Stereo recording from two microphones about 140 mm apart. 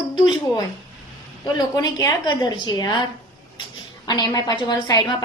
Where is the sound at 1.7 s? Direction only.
25° left (ahead or behind).